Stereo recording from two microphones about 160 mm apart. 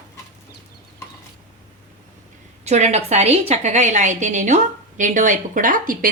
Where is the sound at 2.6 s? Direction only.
45° right (ahead or behind).